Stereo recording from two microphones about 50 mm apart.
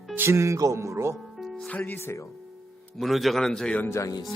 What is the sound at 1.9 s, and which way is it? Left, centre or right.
Speech, left.